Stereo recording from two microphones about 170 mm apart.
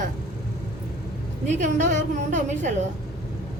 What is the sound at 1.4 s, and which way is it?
A woman's voice, 45° right (ahead or behind).